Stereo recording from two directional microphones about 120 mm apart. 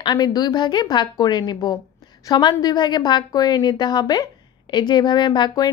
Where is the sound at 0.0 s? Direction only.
35° left (ahead or behind).